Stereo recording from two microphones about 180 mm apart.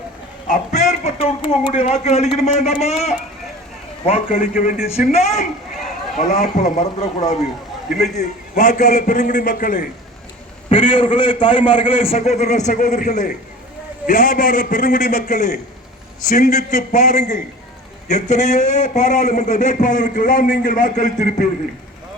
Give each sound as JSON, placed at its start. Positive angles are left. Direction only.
{"t": 0.4, "sound": "a sound", "side_deg": 40}
{"t": 1.8, "sound": "a man's voice", "side_deg": 35}
{"t": 4.3, "sound": "a man's voice", "side_deg": 50}
{"t": 4.9, "sound": "a man's voice", "side_deg": 35}
{"t": 10.7, "sound": "a man's voice", "side_deg": 30}